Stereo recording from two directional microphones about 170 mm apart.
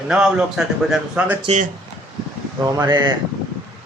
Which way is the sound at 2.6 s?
25° right (ahead or behind).